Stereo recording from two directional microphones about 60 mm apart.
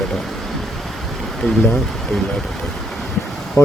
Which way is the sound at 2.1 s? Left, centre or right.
Centre.